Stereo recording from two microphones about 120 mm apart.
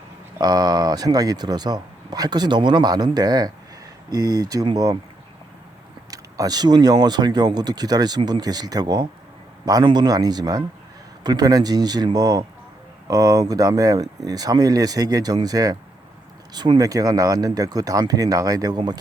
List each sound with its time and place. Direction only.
0.3 s speech: 35° right (ahead or behind)
6.1 s speech: 30° right (ahead or behind)